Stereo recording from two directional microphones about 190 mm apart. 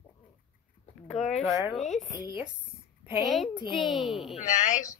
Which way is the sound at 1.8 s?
Centre (ahead or behind).